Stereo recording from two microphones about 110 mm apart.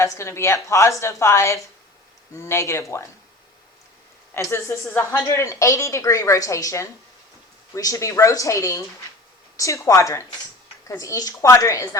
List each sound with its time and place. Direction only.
0.0 s a woman's voice: 25° left (ahead or behind)
4.4 s a woman's voice: 25° left (ahead or behind)